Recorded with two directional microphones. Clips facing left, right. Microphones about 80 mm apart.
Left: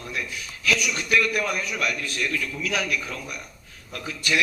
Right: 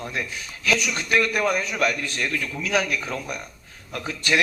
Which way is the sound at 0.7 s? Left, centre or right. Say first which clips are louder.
Right 1 dB; right.